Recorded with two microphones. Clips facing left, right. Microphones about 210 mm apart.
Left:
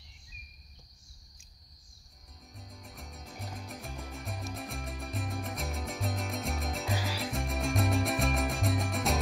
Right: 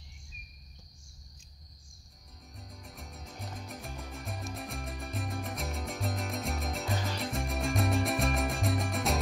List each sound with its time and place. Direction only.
2.5 s music: centre (ahead or behind)